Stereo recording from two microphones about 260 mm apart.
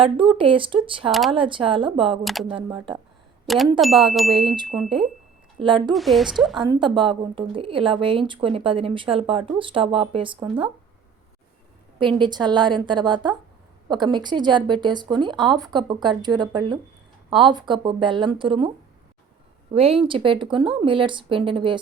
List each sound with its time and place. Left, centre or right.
0.0 s a woman's voice: centre
2.2 s a woman's voice: centre
2.5 s a woman's voice: centre
3.4 s a woman's voice: centre
5.5 s speech: centre
5.9 s a woman's voice: centre
6.6 s a woman's voice: centre
11.9 s a woman's voice: centre
19.7 s a woman's voice: right